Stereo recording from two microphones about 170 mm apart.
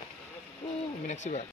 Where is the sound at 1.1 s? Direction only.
45° left (ahead or behind).